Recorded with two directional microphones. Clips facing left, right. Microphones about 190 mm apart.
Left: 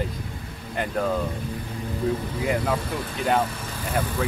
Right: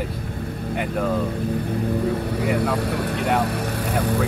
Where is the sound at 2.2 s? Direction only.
65° right (ahead or behind).